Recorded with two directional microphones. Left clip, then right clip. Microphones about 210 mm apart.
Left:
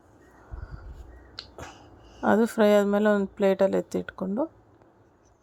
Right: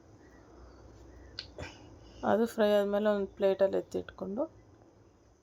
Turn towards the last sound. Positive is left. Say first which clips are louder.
# left 6 dB
turn(degrees=25)  # may be behind; listen again after turning